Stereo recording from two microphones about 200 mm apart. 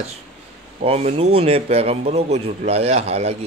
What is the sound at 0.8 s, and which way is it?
A man's voice, 30° right (ahead or behind).